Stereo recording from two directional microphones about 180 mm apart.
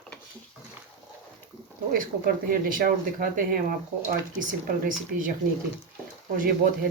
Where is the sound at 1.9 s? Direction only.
55° right (ahead or behind).